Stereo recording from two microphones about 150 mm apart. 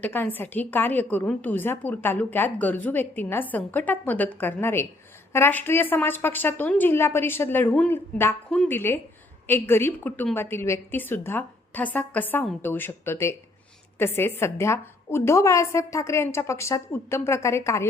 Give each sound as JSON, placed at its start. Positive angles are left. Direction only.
{"t": 0.0, "sound": "a woman's voice", "side_deg": 10}